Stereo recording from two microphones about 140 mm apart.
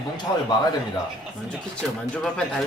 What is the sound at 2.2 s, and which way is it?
Speech, 5° left (ahead or behind).